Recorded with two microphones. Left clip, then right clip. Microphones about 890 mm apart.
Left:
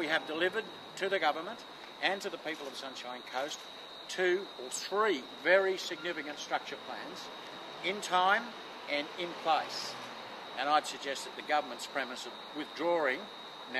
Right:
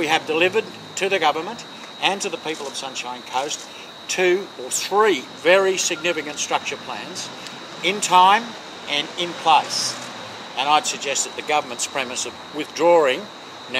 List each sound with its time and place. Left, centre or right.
0.0 s speech: right
7.8 s speech: right
8.9 s speech: right
10.6 s speech: right